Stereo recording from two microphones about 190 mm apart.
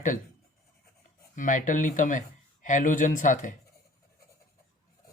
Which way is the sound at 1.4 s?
45° left (ahead or behind).